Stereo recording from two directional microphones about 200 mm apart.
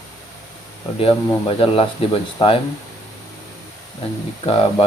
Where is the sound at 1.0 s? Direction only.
25° left (ahead or behind).